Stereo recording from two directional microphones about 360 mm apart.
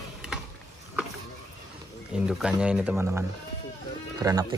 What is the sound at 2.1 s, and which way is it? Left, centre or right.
Speech, centre.